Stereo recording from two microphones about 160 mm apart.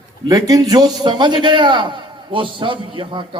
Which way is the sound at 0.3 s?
20° right (ahead or behind).